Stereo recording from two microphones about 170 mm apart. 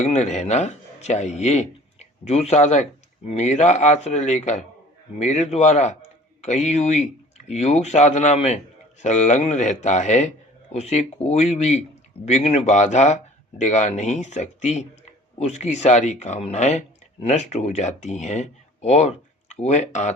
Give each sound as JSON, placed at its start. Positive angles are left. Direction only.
{"t": 0.0, "sound": "speech", "side_deg": 45}